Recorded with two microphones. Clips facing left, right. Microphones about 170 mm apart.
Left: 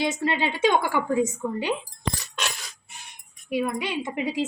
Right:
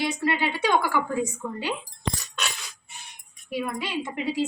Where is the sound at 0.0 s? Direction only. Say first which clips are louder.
Left 1 dB; 20° left (ahead or behind).